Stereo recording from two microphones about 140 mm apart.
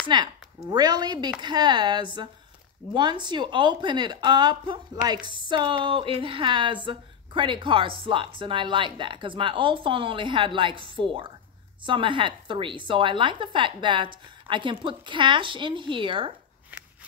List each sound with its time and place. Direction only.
0.1 s a woman's voice: 35° right (ahead or behind)